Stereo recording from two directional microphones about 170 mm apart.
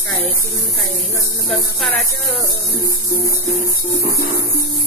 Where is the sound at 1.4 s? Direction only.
Centre (ahead or behind).